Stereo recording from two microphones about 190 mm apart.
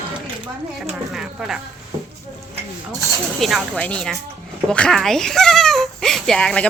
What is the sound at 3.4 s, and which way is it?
Speech, centre (ahead or behind).